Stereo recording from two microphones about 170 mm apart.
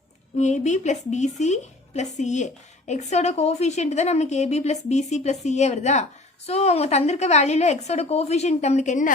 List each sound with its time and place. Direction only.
0.3 s a woman's voice: 45° left (ahead or behind)